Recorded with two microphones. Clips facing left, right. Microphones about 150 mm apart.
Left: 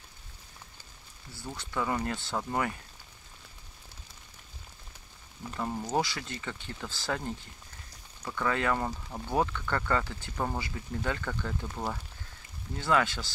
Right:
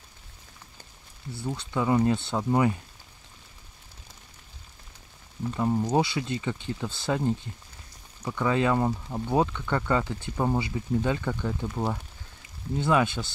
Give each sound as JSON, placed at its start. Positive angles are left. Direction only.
{"t": 1.4, "sound": "speech", "side_deg": -15}
{"t": 5.6, "sound": "speech", "side_deg": -15}